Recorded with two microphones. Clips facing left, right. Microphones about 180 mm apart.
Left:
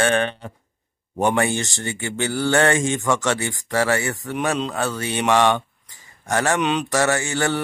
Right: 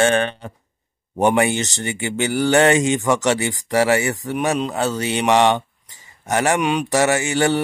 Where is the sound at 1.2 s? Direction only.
15° right (ahead or behind).